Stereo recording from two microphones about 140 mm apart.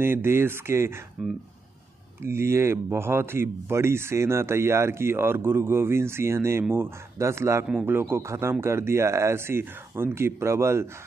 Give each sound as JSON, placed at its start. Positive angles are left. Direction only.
{"t": 0.0, "sound": "speech", "side_deg": -15}
{"t": 1.2, "sound": "speech", "side_deg": -5}
{"t": 2.2, "sound": "a man's voice", "side_deg": -20}